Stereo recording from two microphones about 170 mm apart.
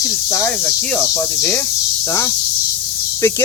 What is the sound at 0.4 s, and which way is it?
Speech, 5° left (ahead or behind).